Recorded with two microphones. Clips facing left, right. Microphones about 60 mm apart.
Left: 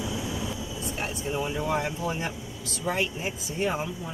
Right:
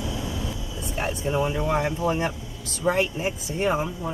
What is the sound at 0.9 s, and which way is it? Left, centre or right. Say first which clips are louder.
Speech: right 6 dB; right.